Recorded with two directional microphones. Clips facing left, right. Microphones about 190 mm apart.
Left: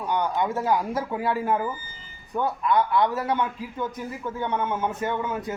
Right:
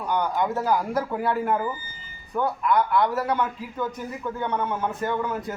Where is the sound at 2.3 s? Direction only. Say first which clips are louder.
Even; 20° left (ahead or behind).